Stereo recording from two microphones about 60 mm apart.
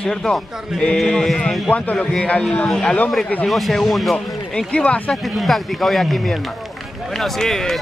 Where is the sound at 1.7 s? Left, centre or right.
Left.